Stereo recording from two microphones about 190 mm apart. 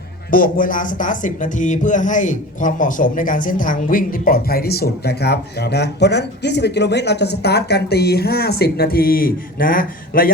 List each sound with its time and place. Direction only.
0.3 s speech: 45° left (ahead or behind)